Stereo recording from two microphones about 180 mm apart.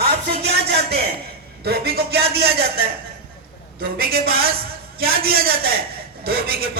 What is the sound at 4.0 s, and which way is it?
A man's voice, 60° right (ahead or behind).